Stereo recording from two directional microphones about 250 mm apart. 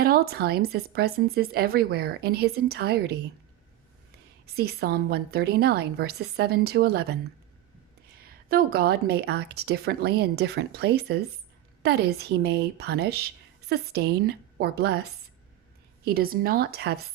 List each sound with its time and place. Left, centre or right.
0.0 s speech: right
4.4 s speech: right
8.4 s speech: right